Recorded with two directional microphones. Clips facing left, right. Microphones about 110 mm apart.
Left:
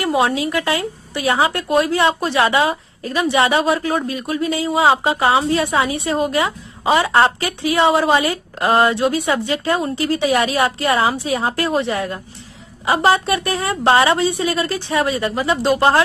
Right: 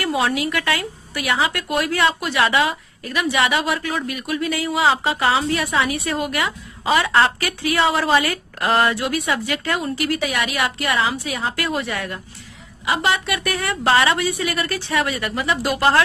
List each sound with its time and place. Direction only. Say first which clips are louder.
0.0 s speech: left 3 dB; 25° left (ahead or behind)